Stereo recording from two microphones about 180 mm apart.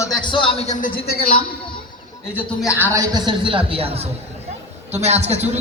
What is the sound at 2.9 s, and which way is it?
A man's voice, 20° right (ahead or behind).